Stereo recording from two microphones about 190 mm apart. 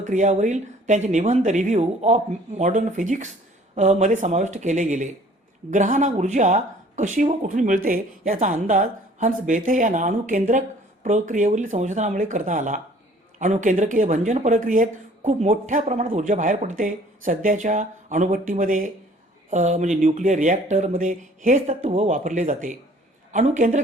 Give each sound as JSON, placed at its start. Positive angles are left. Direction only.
{"t": 0.0, "sound": "speech", "side_deg": -40}